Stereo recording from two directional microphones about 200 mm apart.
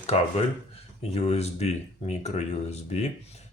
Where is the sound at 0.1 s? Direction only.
35° left (ahead or behind).